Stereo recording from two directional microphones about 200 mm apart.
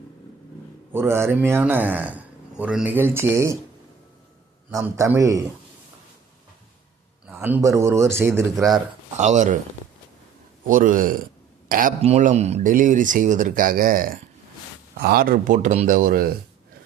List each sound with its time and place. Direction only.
0.9 s speech: 10° right (ahead or behind)
4.7 s speech: 15° right (ahead or behind)
7.3 s speech: 10° right (ahead or behind)
9.1 s speech: 35° right (ahead or behind)
10.7 s speech: 40° right (ahead or behind)